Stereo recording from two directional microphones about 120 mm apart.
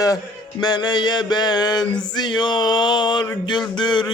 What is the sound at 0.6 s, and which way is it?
Speech, 35° left (ahead or behind).